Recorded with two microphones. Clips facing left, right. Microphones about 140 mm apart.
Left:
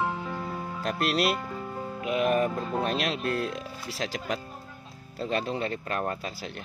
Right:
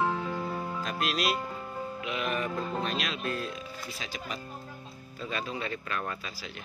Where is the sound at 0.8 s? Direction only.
60° left (ahead or behind).